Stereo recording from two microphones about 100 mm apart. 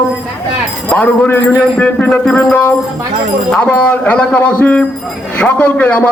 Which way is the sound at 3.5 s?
10° left (ahead or behind).